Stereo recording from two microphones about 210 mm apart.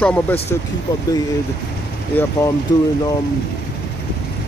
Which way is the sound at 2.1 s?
10° left (ahead or behind).